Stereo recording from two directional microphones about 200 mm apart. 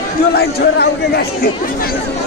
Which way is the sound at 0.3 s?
55° left (ahead or behind).